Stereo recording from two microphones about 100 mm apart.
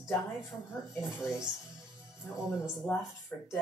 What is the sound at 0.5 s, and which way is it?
Speech, 20° left (ahead or behind).